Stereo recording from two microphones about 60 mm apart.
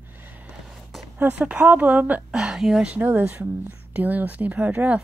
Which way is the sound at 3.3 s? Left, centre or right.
Right.